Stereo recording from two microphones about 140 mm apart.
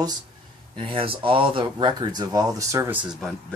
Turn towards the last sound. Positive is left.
turn(degrees=-5)  # may be behind; listen again after turning